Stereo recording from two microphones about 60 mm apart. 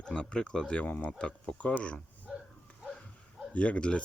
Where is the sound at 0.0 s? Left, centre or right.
Centre.